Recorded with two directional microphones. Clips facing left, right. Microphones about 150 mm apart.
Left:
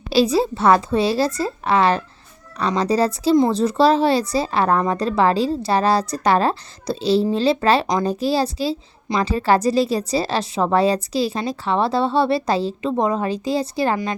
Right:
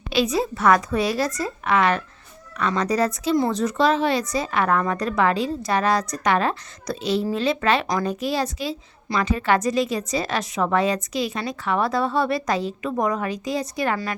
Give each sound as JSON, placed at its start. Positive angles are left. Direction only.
{"t": 0.1, "sound": "a woman's voice", "side_deg": 35}